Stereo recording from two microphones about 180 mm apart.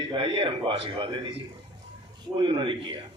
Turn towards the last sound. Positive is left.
turn(degrees=-25)  # may be behind; listen again after turning